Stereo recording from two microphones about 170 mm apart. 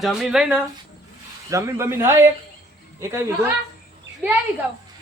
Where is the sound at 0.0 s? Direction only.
Centre (ahead or behind).